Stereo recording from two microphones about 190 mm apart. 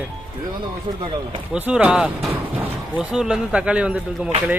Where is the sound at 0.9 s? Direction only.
35° right (ahead or behind).